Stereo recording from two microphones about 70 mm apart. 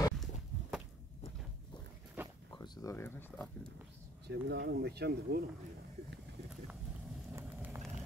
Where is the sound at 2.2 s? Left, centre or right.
Right.